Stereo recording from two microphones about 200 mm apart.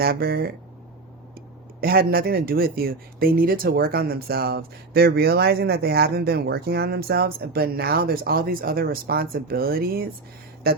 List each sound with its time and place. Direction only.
0.0 s speech: 50° right (ahead or behind)
1.8 s speech: 50° right (ahead or behind)